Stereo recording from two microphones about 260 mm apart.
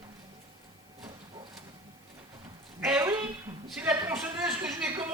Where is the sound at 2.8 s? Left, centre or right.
Centre.